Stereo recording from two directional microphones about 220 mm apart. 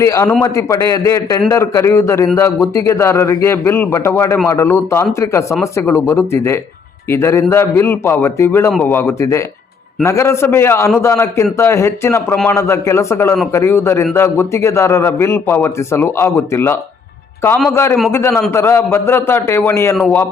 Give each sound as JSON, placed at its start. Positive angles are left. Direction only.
{"t": 0.0, "sound": "a man's voice", "side_deg": 15}